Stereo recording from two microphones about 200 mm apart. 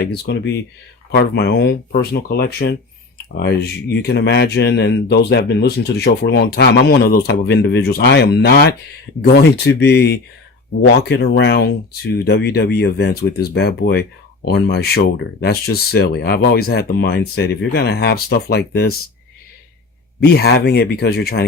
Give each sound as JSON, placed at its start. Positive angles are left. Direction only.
{"t": 0.0, "sound": "speech", "side_deg": 55}
{"t": 20.2, "sound": "speech", "side_deg": 55}